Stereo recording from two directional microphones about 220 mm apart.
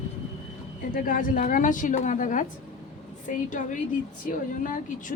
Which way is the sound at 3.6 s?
40° left (ahead or behind).